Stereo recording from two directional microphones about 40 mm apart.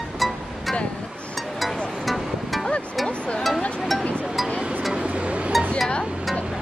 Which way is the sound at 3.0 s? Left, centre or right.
Left.